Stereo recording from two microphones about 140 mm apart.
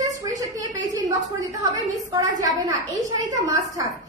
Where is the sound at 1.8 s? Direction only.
25° right (ahead or behind).